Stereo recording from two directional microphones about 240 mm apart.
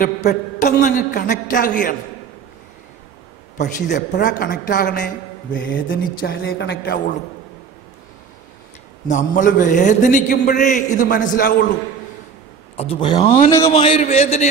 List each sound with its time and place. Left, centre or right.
0.0 s a man's voice: left
3.9 s a man's voice: left
5.5 s a man's voice: left
9.0 s a man's voice: left
12.7 s a man's voice: left